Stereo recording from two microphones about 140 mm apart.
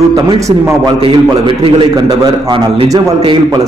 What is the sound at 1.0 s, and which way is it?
A man's voice, 40° right (ahead or behind).